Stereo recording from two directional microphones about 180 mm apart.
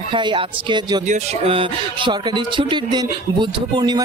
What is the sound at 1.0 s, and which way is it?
Speech, 35° right (ahead or behind).